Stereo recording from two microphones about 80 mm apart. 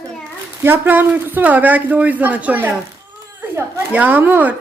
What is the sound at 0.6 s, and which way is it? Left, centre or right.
Speech, right.